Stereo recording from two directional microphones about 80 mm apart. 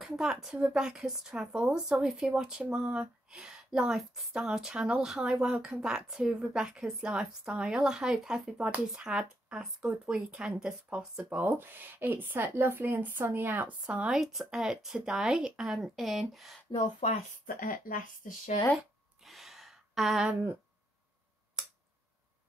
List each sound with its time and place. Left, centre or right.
0.0 s a woman's voice: centre
11.2 s speech: right
13.8 s speech: centre
19.2 s sigh: centre